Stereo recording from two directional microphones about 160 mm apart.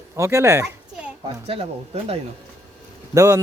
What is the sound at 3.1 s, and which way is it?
Speech, 20° right (ahead or behind).